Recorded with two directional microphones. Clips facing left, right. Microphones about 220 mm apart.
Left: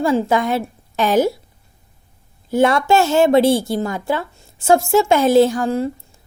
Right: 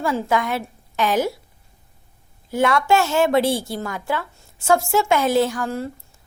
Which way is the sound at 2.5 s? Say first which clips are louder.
Left 4 dB; 30° left (ahead or behind).